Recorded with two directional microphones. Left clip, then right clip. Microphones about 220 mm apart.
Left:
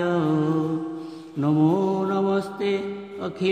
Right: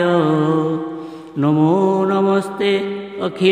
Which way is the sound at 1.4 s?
25° right (ahead or behind).